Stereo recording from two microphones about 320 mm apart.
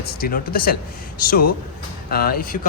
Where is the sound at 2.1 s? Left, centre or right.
Left.